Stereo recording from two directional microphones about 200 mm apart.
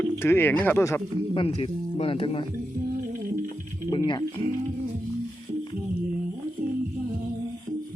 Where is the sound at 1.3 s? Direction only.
30° left (ahead or behind).